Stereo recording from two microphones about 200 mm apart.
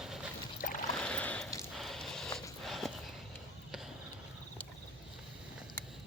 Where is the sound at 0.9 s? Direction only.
5° left (ahead or behind).